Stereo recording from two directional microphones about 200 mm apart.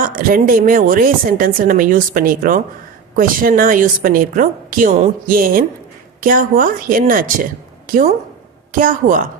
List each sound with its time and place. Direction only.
0.2 s a woman's voice: 45° right (ahead or behind)